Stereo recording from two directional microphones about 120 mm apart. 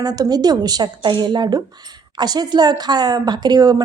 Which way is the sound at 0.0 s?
35° right (ahead or behind).